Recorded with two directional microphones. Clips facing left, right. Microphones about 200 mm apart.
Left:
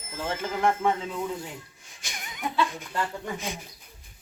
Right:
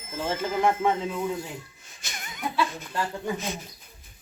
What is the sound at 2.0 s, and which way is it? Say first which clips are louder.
Wheeze: even; 15° left (ahead or behind).